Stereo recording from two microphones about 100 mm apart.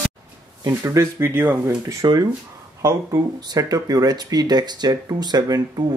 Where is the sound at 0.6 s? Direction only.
35° right (ahead or behind).